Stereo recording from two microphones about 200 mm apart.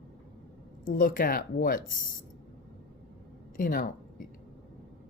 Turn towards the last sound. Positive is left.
turn(degrees=45)  # may be behind; listen again after turning